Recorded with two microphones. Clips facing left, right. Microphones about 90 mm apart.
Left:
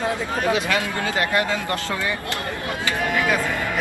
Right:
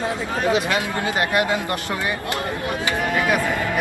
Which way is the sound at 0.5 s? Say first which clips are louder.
Right 1 dB; 20° right (ahead or behind).